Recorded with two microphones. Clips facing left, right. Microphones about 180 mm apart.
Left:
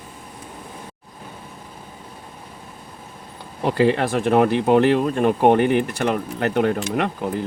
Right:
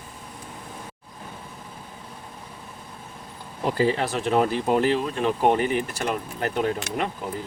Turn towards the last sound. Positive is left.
turn(degrees=70)  # may be behind; listen again after turning